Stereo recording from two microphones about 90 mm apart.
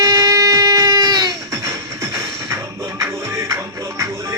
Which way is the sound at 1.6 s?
35° right (ahead or behind).